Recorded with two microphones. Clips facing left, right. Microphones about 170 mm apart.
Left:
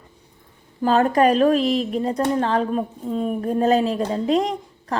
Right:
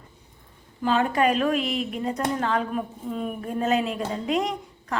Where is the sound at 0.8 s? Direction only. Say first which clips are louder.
Left 5 dB; 40° left (ahead or behind).